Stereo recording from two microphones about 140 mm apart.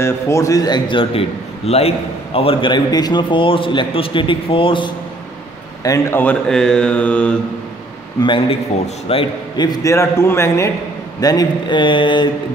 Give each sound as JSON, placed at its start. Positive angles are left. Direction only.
{"t": 0.0, "sound": "a man's voice", "side_deg": 20}
{"t": 1.7, "sound": "a man's voice", "side_deg": 45}
{"t": 5.9, "sound": "mantra", "side_deg": 15}
{"t": 6.5, "sound": "mantra", "side_deg": 5}
{"t": 8.2, "sound": "a man's voice", "side_deg": 35}